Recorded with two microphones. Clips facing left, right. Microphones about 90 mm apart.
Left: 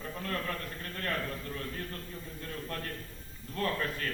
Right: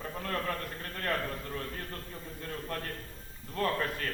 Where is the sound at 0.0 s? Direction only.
30° right (ahead or behind).